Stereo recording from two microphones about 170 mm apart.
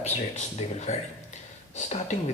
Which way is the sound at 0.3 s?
40° left (ahead or behind).